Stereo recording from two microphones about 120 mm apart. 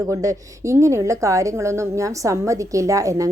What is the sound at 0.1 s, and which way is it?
A woman's voice, 30° right (ahead or behind).